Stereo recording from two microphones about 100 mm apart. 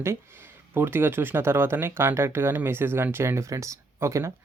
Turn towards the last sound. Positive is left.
turn(degrees=-30)  # may be behind; listen again after turning